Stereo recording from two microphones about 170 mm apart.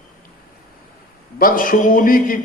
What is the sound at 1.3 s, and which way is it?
A man's voice, 55° left (ahead or behind).